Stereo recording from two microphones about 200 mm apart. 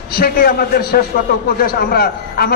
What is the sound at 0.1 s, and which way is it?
A man's voice, 50° left (ahead or behind).